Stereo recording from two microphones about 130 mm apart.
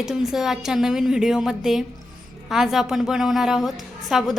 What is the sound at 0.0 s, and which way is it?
A woman's voice, centre (ahead or behind).